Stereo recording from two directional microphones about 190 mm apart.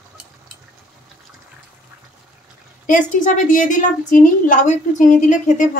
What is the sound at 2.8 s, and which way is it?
A woman's voice, 45° left (ahead or behind).